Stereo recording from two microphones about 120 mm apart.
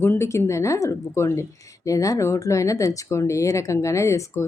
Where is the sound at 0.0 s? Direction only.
20° left (ahead or behind).